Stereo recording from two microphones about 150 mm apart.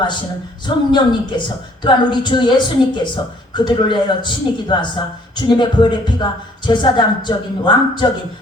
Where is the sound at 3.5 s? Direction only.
30° left (ahead or behind).